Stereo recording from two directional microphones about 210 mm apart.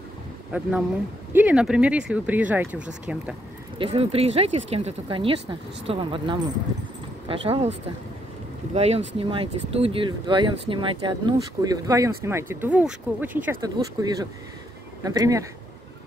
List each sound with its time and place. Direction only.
0.5 s speech: 5° right (ahead or behind)
3.7 s speech: 25° right (ahead or behind)
8.7 s speech: 30° right (ahead or behind)